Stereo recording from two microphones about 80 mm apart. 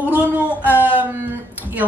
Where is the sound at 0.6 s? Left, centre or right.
Left.